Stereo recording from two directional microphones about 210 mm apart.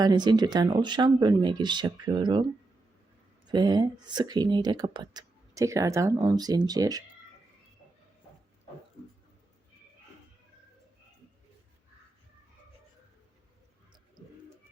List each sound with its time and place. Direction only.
0.0 s speech: 20° right (ahead or behind)
3.5 s speech: 20° right (ahead or behind)